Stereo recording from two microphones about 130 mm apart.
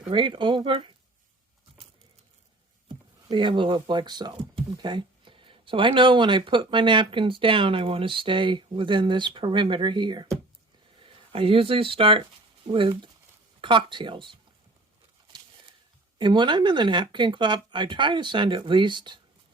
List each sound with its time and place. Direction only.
0.1 s speech: 40° right (ahead or behind)
3.2 s speech: 35° right (ahead or behind)
11.3 s speech: 45° right (ahead or behind)
13.6 s speech: 40° right (ahead or behind)
16.1 s speech: 35° right (ahead or behind)